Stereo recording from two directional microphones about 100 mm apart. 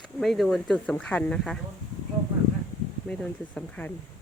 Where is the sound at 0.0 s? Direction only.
Centre (ahead or behind).